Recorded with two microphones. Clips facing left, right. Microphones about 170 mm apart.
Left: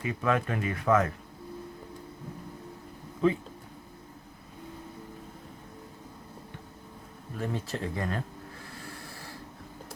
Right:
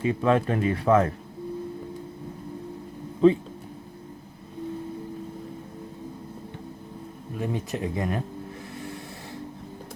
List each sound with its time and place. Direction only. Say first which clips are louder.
0.0 s speech: right 6 dB; 30° right (ahead or behind)
3.2 s speech: right 8 dB; 30° right (ahead or behind)
7.3 s speech: right 4 dB; 15° right (ahead or behind)
8.7 s a sound: right 7 dB; 20° right (ahead or behind)